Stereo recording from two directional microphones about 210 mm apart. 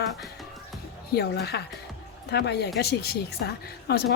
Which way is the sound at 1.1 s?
50° left (ahead or behind).